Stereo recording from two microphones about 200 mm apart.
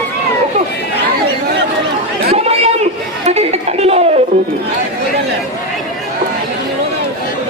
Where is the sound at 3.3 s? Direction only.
30° right (ahead or behind).